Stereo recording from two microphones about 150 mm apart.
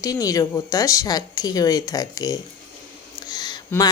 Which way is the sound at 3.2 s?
25° left (ahead or behind).